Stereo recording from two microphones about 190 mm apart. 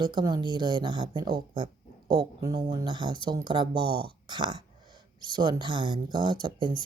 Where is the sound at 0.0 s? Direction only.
25° right (ahead or behind).